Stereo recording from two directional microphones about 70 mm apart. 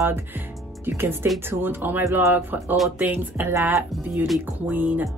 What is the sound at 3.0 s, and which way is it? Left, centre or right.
Speech, right.